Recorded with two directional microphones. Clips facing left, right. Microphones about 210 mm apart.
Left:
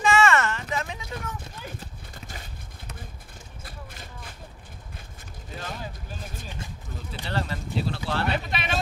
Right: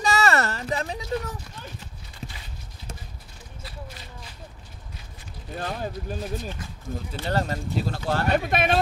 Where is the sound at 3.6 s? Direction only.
50° left (ahead or behind).